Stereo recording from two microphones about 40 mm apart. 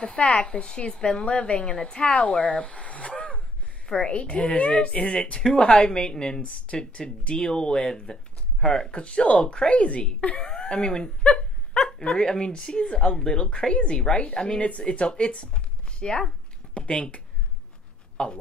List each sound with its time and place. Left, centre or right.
0.0 s speech: left
6.4 s speech: left
10.5 s dog: left
12.0 s speech: centre
18.1 s a sound: left